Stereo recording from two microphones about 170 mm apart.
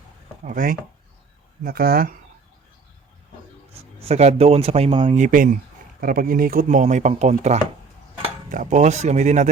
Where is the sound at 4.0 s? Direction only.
40° right (ahead or behind).